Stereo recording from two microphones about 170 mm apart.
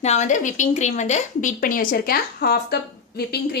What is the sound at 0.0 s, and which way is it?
A woman's voice, 40° left (ahead or behind).